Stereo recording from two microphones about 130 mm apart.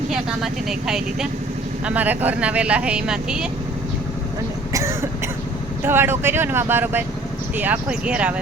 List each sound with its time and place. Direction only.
0.1 s speech: 5° right (ahead or behind)
4.7 s cough: 20° right (ahead or behind)
5.8 s speech: 20° right (ahead or behind)